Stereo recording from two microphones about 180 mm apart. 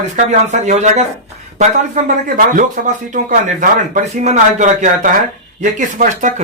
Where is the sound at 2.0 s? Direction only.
45° right (ahead or behind).